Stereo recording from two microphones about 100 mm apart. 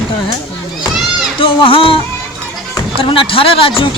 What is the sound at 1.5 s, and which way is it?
Speech, 60° left (ahead or behind).